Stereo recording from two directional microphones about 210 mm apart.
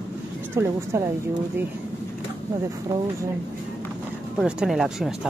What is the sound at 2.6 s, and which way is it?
Speech, 15° right (ahead or behind).